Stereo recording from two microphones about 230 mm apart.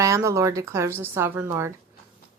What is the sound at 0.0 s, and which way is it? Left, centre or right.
A woman's voice, centre.